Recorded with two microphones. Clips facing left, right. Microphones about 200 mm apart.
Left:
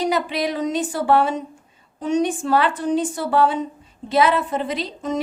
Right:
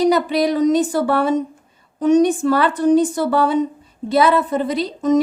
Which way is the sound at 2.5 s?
40° right (ahead or behind).